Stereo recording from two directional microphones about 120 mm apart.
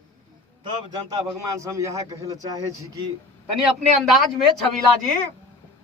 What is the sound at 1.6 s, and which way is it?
A man's voice, 25° right (ahead or behind).